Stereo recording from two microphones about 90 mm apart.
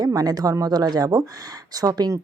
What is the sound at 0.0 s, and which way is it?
Speech, 45° right (ahead or behind).